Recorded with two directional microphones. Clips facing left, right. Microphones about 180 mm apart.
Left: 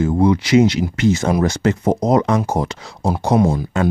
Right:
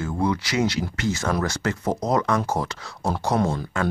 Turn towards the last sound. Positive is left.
turn(degrees=15)  # may be behind; listen again after turning